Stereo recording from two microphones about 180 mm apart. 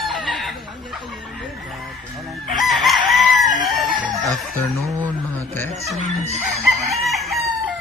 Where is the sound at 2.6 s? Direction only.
Centre (ahead or behind).